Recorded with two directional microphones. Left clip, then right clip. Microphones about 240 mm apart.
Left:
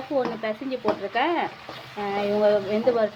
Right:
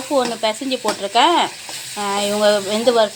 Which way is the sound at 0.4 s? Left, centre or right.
Right.